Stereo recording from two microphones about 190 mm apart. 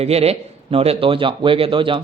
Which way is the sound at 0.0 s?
35° right (ahead or behind).